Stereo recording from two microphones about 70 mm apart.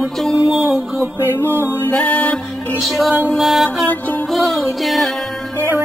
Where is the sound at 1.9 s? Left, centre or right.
Centre.